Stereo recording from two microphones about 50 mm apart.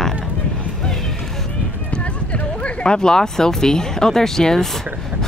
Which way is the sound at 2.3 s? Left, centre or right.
Left.